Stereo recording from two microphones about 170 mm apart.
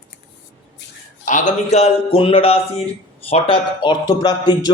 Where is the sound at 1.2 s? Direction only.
45° left (ahead or behind).